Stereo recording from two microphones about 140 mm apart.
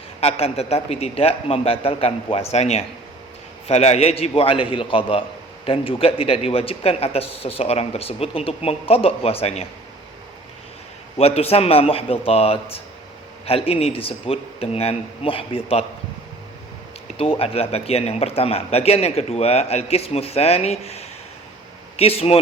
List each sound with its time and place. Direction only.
0.2 s a man's voice: 45° left (ahead or behind)
11.2 s a man's voice: 45° left (ahead or behind)
17.2 s a man's voice: 45° left (ahead or behind)